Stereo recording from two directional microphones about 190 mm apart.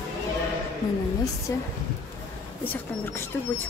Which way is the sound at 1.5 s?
15° left (ahead or behind).